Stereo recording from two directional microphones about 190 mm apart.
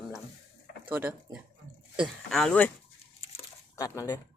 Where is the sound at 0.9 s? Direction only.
10° right (ahead or behind).